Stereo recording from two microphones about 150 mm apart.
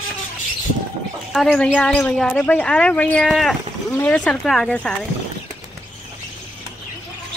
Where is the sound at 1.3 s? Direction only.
5° left (ahead or behind).